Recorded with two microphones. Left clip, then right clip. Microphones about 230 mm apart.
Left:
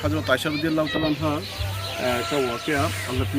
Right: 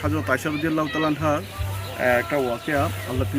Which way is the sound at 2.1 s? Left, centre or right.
Right.